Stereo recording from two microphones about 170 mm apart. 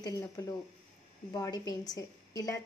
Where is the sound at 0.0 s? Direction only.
20° left (ahead or behind).